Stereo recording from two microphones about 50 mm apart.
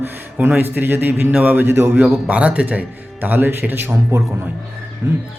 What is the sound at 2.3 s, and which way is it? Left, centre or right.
A man's voice, right.